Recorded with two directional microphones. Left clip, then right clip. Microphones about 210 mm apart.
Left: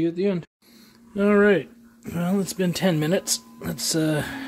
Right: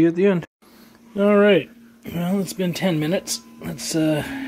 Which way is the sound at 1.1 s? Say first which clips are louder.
Right 3 dB; 15° left (ahead or behind).